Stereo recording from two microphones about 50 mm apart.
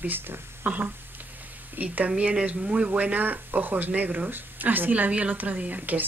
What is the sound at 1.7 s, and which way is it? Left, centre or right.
Speech, right.